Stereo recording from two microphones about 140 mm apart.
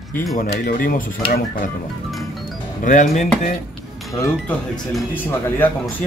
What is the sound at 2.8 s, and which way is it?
Speech, 60° left (ahead or behind).